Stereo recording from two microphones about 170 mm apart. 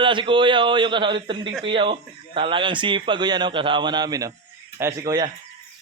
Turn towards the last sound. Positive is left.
turn(degrees=-20)  # may be behind; listen again after turning